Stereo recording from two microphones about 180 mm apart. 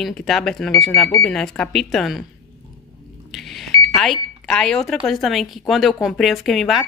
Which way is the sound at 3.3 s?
Centre (ahead or behind).